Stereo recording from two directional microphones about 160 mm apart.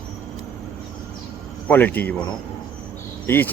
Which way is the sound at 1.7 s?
10° left (ahead or behind).